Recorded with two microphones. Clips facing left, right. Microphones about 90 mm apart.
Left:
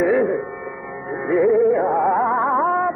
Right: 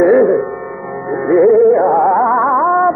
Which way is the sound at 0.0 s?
35° right (ahead or behind).